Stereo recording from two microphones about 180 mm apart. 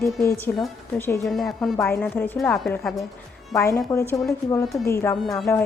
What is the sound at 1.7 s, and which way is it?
A woman's voice, 15° left (ahead or behind).